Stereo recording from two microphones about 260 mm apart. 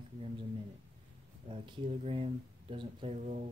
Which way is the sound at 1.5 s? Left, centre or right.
Right.